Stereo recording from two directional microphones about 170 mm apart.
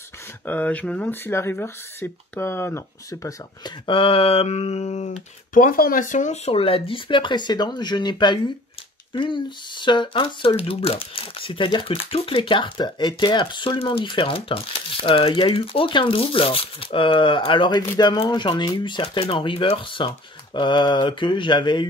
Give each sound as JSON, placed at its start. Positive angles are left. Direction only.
{"t": 0.5, "sound": "speech", "side_deg": 10}